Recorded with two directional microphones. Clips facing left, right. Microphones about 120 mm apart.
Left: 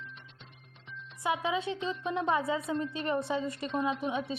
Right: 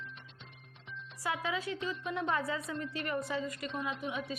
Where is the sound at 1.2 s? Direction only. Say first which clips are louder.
Left 5 dB; 20° left (ahead or behind).